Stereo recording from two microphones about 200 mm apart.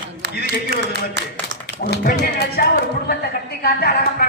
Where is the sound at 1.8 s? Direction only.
50° left (ahead or behind).